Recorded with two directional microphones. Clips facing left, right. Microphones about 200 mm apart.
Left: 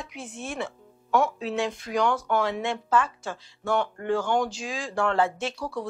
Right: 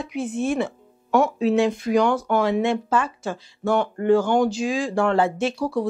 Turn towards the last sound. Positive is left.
turn(degrees=-30)  # may be behind; listen again after turning